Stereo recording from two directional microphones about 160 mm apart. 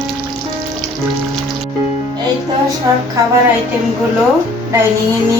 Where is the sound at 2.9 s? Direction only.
20° right (ahead or behind).